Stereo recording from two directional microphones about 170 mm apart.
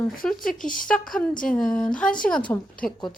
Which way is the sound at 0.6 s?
55° left (ahead or behind).